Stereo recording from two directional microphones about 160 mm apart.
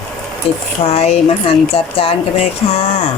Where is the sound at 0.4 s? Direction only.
40° left (ahead or behind).